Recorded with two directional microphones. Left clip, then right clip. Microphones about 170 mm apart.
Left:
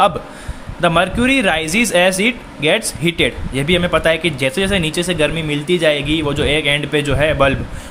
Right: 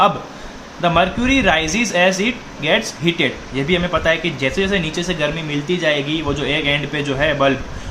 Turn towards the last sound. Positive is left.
turn(degrees=50)  # may be behind; listen again after turning